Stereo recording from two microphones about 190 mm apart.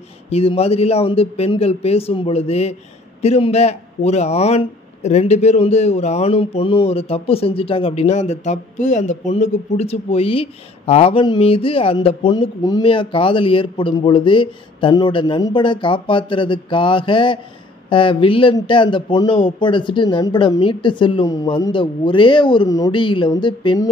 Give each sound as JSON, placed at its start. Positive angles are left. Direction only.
{"t": 0.3, "sound": "a man's voice", "side_deg": 30}